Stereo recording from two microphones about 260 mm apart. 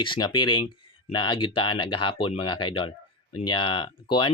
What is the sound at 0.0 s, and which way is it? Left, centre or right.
Speech, centre.